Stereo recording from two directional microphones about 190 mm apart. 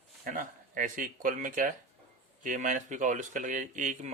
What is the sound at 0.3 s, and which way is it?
Speech, 45° right (ahead or behind).